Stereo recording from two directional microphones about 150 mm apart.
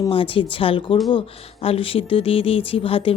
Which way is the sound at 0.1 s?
35° left (ahead or behind).